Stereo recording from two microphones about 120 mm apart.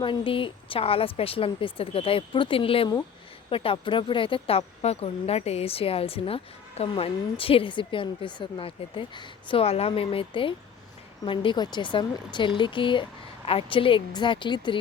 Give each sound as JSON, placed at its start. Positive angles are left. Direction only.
{"t": 0.0, "sound": "speech", "side_deg": 45}